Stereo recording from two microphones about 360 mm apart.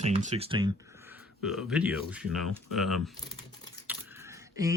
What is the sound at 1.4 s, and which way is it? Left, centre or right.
Speech, centre.